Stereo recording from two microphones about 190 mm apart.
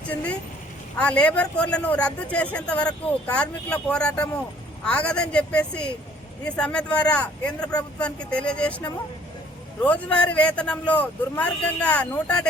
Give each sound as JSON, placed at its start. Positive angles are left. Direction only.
{"t": 0.1, "sound": "speech", "side_deg": 5}